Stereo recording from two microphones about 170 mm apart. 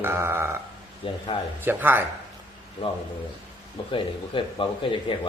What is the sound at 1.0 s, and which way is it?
Speech, 30° left (ahead or behind).